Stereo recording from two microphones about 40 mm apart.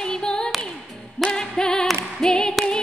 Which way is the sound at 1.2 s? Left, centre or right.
Centre.